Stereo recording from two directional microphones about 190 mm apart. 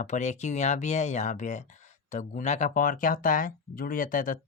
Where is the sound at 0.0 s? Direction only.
40° left (ahead or behind).